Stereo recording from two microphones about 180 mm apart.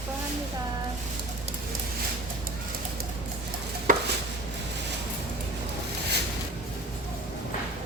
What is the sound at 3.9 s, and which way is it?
Chopping, 45° right (ahead or behind).